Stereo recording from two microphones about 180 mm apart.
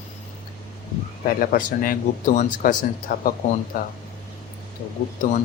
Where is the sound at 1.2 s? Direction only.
50° left (ahead or behind).